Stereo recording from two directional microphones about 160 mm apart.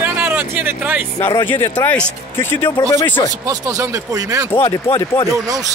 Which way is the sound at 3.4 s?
20° right (ahead or behind).